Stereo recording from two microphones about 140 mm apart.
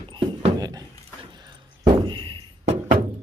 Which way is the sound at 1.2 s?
35° right (ahead or behind).